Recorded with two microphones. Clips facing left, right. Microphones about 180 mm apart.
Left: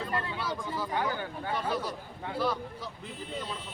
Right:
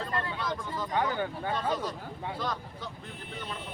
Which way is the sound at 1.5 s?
10° left (ahead or behind).